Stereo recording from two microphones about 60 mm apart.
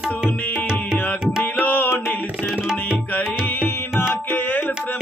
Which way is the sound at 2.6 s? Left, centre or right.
Centre.